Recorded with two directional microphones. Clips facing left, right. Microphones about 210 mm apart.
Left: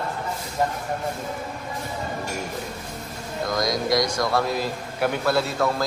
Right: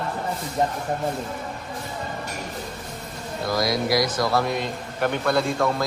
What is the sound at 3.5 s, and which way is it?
A man's voice, 5° right (ahead or behind).